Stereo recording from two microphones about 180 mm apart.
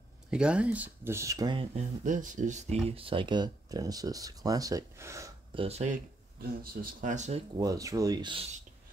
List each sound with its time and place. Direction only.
0.3 s speech: 5° right (ahead or behind); by 1.7 s 25° right (ahead or behind)
1.8 s speech: 45° right (ahead or behind); by 5.3 s 15° right (ahead or behind)
5.5 s speech: 35° right (ahead or behind)
6.6 s speech: 55° right (ahead or behind)
7.5 s speech: 20° right (ahead or behind)